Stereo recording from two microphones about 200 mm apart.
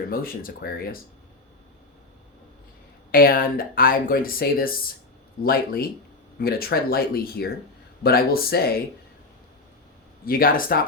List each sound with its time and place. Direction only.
0.1 s speech: 45° left (ahead or behind)
3.1 s speech: 45° left (ahead or behind)
10.2 s speech: 45° left (ahead or behind)